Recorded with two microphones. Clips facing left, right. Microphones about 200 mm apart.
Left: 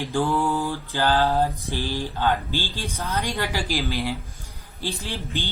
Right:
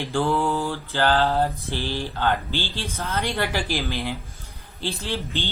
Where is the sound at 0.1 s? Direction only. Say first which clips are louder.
Right 1 dB; 15° left (ahead or behind).